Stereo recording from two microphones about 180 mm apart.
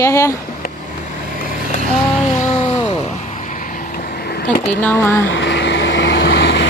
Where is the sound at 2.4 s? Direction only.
35° left (ahead or behind).